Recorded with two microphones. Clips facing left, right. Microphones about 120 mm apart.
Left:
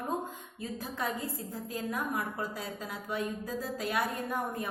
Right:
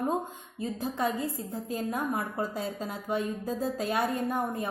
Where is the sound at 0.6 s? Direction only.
25° right (ahead or behind).